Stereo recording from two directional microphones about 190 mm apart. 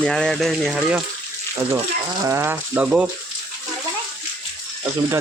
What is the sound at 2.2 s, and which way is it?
Speech, 15° right (ahead or behind).